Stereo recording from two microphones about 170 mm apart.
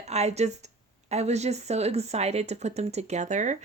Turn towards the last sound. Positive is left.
turn(degrees=-45)  # may be behind; listen again after turning